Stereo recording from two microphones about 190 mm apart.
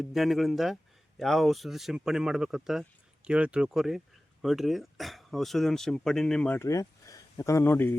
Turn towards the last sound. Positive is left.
turn(degrees=10)  # may be behind; listen again after turning